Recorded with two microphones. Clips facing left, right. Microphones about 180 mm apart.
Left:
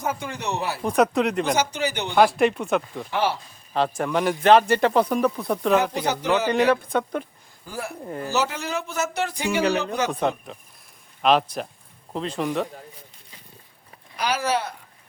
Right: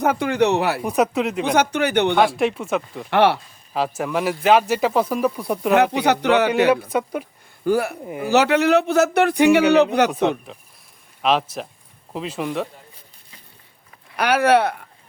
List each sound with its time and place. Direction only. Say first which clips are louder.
0.0 s a man's voice: right 10 dB; 65° right (ahead or behind)
0.8 s speech: even; 5° right (ahead or behind)
1.5 s speech: right 5 dB; 60° right (ahead or behind)
2.1 s speech: even; centre (ahead or behind)
3.1 s a man's voice: right 8 dB; 70° right (ahead or behind)
3.7 s speech: even; 5° right (ahead or behind)
5.7 s a man's voice: right 7 dB; 70° right (ahead or behind)
6.5 s speech: right 3 dB; 5° right (ahead or behind)
7.6 s a man's voice: right 13 dB; 70° right (ahead or behind)
10.1 s speech: right 4 dB; 5° right (ahead or behind)
14.2 s speech: right 8 dB; 60° right (ahead or behind)